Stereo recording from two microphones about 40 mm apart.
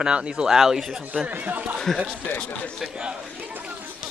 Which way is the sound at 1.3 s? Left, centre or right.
Right.